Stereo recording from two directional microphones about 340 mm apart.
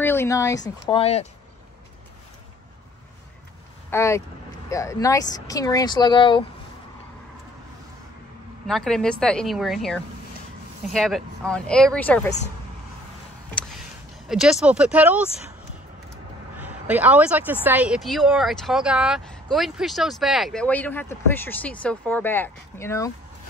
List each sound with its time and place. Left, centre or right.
0.0 s speech: centre
3.9 s speech: centre
8.6 s speech: centre
14.2 s speech: centre
16.5 s speech: centre